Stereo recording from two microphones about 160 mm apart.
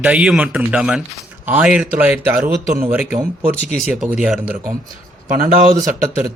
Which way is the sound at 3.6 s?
60° right (ahead or behind).